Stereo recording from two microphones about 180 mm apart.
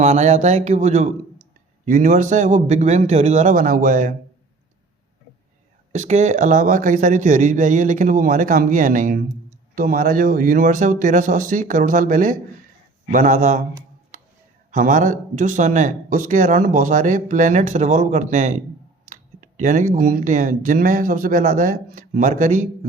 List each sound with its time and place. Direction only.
0.0 s speech: 40° right (ahead or behind)
5.9 s speech: 40° right (ahead or behind)
14.7 s speech: 45° right (ahead or behind)